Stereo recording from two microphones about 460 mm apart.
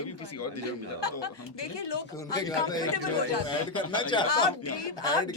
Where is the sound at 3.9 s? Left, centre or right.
Centre.